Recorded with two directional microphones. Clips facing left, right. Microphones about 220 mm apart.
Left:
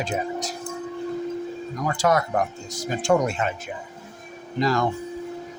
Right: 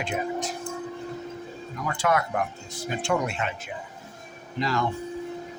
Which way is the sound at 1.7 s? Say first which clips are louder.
Left 3 dB; 40° left (ahead or behind).